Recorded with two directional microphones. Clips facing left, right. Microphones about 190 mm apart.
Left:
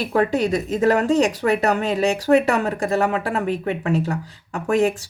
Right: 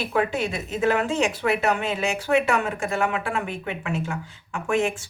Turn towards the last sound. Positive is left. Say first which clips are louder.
# left 5 dB
turn(degrees=35)  # may be behind; listen again after turning